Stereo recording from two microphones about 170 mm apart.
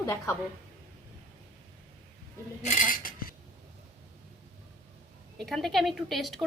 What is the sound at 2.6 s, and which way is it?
Cutlery, 45° left (ahead or behind).